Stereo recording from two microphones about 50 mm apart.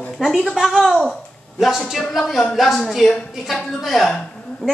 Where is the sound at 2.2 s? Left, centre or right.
Centre.